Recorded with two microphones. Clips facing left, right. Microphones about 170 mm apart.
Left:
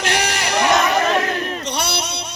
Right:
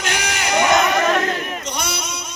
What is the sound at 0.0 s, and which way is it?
Crowd, 35° left (ahead or behind).